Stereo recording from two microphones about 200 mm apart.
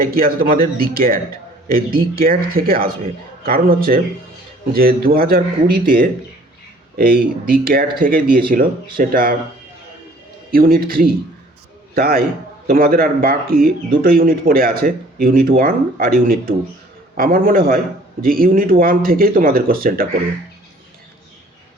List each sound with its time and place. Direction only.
0.0 s speech: 45° right (ahead or behind)
10.5 s speech: 45° right (ahead or behind)